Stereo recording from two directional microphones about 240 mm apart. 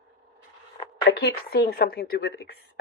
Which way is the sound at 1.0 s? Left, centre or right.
Left.